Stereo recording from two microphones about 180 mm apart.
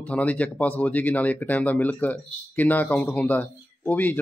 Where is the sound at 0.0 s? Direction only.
10° left (ahead or behind).